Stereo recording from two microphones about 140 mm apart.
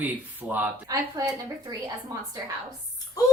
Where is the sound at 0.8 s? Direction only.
25° right (ahead or behind).